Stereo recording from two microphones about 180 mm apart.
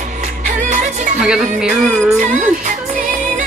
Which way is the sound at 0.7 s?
45° right (ahead or behind).